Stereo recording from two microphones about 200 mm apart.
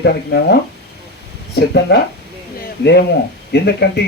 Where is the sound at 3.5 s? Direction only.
55° left (ahead or behind).